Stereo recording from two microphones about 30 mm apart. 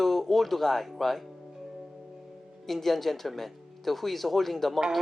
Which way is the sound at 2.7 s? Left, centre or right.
Centre.